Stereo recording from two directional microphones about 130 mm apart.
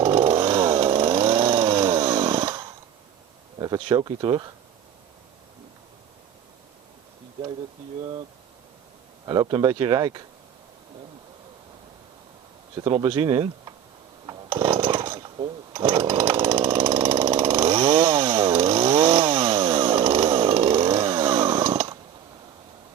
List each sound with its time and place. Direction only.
0.0 s chainsaw: 40° right (ahead or behind)
3.6 s speech: 35° right (ahead or behind)
9.2 s speech: 35° right (ahead or behind)
12.7 s speech: 35° right (ahead or behind)
14.5 s chainsaw: 40° right (ahead or behind)